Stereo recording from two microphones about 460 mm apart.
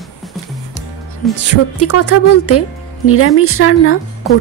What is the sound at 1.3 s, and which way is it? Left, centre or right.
Speech, left.